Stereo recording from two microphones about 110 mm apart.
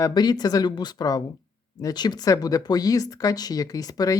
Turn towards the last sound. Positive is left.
turn(degrees=35)  # may be behind; listen again after turning